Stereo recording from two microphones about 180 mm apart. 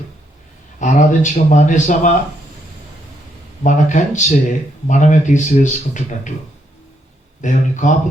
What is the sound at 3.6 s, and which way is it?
Speech, 45° left (ahead or behind).